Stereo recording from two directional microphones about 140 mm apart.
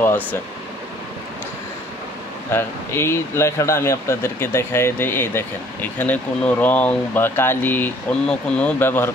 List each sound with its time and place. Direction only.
0.0 s speech: 15° left (ahead or behind)
2.5 s speech: 20° left (ahead or behind)